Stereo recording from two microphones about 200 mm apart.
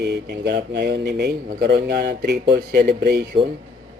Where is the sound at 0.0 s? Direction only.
55° right (ahead or behind).